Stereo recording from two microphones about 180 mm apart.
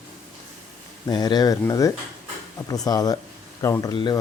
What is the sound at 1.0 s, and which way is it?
Speech, 20° left (ahead or behind).